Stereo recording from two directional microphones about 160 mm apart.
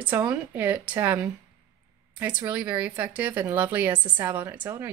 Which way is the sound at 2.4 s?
10° right (ahead or behind).